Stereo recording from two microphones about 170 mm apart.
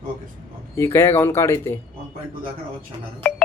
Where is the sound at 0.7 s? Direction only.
15° left (ahead or behind).